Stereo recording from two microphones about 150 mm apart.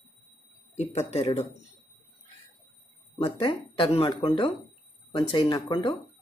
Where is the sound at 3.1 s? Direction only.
40° left (ahead or behind).